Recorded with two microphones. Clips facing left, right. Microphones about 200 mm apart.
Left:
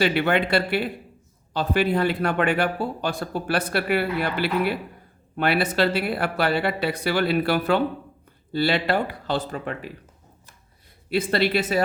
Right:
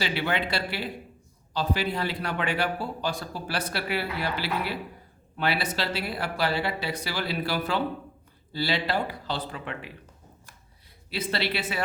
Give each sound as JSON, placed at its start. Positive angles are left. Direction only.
{"t": 0.0, "sound": "a man's voice", "side_deg": 55}
{"t": 11.1, "sound": "speech", "side_deg": 50}